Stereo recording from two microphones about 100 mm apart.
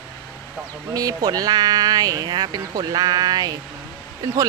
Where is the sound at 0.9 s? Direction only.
40° right (ahead or behind).